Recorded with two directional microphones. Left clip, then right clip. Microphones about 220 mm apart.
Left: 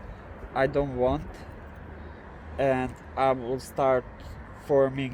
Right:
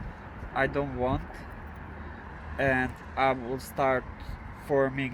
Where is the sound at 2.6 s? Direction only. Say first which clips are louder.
Left 1 dB; 35° left (ahead or behind).